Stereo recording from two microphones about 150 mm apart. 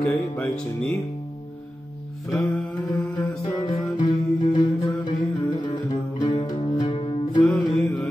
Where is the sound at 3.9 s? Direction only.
30° left (ahead or behind).